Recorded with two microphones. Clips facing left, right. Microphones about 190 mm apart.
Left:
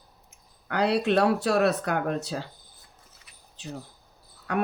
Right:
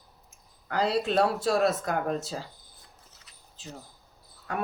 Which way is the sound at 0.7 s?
65° left (ahead or behind).